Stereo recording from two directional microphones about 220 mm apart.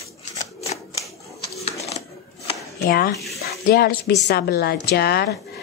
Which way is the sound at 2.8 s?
40° left (ahead or behind).